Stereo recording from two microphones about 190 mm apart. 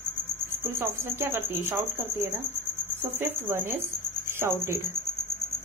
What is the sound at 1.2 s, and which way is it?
Speech, 15° right (ahead or behind).